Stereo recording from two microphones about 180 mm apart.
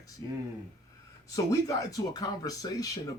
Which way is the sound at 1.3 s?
20° left (ahead or behind).